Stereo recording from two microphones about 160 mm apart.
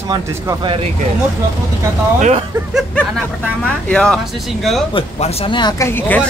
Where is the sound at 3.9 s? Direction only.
5° left (ahead or behind).